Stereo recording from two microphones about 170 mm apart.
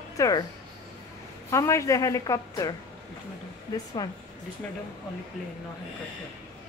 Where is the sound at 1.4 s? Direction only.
15° left (ahead or behind).